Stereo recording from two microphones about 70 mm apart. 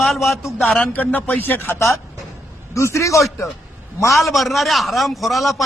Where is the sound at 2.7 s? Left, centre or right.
Left.